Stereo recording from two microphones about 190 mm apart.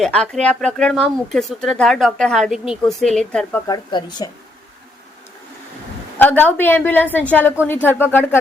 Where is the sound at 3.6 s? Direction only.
20° left (ahead or behind).